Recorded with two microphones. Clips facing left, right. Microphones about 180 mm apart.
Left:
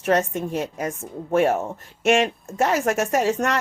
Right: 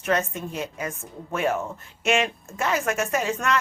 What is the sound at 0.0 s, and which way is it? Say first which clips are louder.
A woman's voice: left 4 dB; 40° left (ahead or behind).